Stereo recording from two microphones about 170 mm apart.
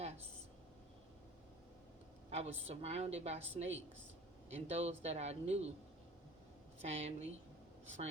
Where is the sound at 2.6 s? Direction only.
35° right (ahead or behind).